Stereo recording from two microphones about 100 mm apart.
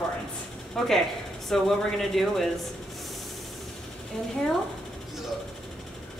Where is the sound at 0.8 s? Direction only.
5° left (ahead or behind).